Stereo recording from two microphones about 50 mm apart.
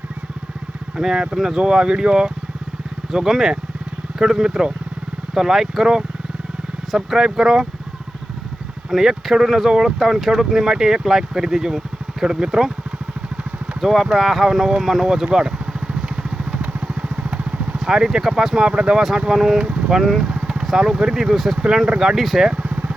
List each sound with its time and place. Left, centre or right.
0.9 s speech: centre
8.9 s speech: centre
13.8 s speech: centre
15.0 s speech: centre
16.4 s vehicle: right
16.9 s motorcycle: right
17.7 s speech: centre
20.2 s vehicle: centre
20.7 s speech: centre
21.3 s speech: centre
21.8 s speech: centre
22.2 s speech: centre
22.5 s vehicle: right